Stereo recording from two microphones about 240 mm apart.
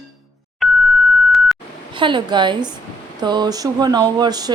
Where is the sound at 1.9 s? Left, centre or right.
Centre.